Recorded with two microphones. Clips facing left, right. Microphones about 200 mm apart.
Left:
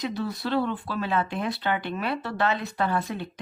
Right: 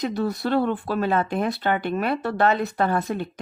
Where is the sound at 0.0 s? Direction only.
50° right (ahead or behind).